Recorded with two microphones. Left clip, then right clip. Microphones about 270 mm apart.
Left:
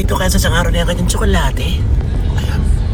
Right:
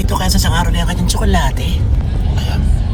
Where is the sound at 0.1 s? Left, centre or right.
Left.